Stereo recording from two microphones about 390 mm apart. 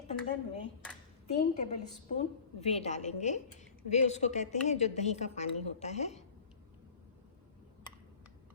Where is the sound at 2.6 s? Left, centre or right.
Centre.